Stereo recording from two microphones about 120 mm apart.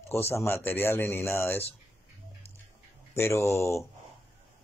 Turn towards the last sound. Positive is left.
turn(degrees=25)  # may be behind; listen again after turning